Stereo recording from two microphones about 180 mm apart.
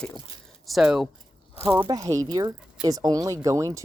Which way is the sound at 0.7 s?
Centre (ahead or behind).